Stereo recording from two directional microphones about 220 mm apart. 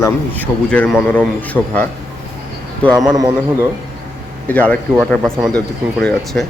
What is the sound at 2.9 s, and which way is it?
Speech, 15° right (ahead or behind).